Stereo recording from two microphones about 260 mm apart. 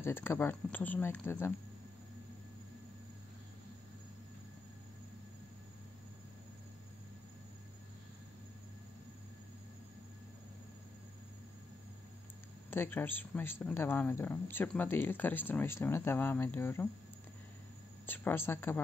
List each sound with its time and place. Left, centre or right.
0.0 s speech: centre
12.6 s speech: centre
18.0 s speech: centre